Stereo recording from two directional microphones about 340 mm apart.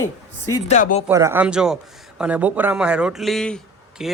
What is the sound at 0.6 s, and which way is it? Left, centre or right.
Speech, left.